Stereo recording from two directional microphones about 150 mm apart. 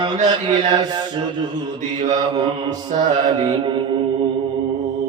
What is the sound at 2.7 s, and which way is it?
Mantra, 55° right (ahead or behind).